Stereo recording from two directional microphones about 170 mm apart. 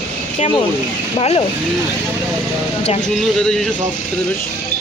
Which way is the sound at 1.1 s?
35° left (ahead or behind).